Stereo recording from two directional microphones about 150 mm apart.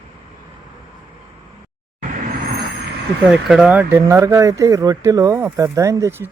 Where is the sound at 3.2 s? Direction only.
Centre (ahead or behind); by 6.2 s 20° right (ahead or behind).